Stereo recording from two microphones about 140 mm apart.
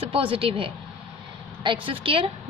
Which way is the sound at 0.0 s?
40° right (ahead or behind).